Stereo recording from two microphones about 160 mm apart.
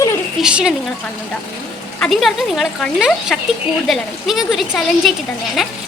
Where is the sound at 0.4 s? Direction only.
5° right (ahead or behind).